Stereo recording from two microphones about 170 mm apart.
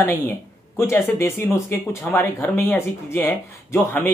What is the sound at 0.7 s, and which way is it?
Speech, 15° left (ahead or behind).